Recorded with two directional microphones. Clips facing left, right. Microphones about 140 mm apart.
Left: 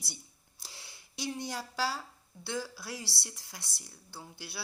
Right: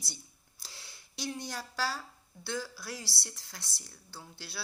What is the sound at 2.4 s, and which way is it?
Speech, 25° left (ahead or behind).